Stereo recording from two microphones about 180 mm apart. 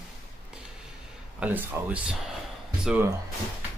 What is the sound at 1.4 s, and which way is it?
Speech, 10° right (ahead or behind).